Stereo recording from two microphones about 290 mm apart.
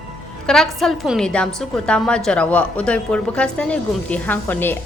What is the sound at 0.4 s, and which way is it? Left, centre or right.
A woman's voice, centre.